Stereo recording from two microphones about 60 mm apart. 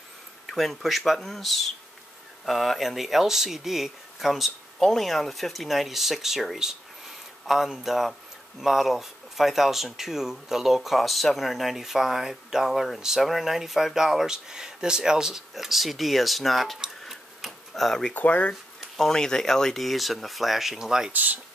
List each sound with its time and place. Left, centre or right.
0.5 s speech: centre
17.1 s tick-tock: centre
18.1 s speech: left
18.8 s speech: centre
21.1 s speech: right